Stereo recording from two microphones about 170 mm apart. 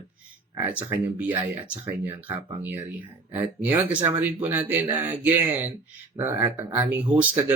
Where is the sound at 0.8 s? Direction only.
10° right (ahead or behind).